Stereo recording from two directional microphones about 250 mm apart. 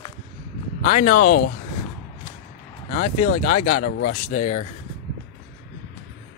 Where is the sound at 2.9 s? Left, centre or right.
Left.